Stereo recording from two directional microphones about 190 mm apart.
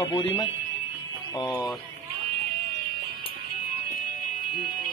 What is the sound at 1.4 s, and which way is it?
Speech, 20° left (ahead or behind).